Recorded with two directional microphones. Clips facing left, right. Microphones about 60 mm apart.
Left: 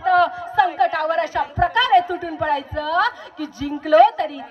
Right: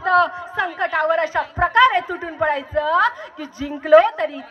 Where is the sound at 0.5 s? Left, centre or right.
Right.